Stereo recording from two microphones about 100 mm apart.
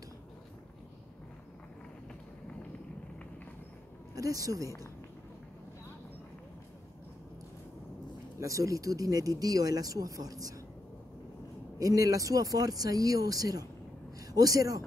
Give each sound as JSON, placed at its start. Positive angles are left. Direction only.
{"t": 4.1, "sound": "speech", "side_deg": -35}
{"t": 8.4, "sound": "speech", "side_deg": -30}
{"t": 11.8, "sound": "speech", "side_deg": -35}